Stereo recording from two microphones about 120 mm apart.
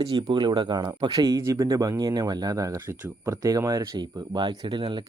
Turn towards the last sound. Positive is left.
turn(degrees=-40)  # may be behind; listen again after turning